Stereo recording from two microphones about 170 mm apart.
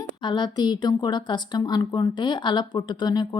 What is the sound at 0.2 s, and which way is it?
Speech, 25° left (ahead or behind).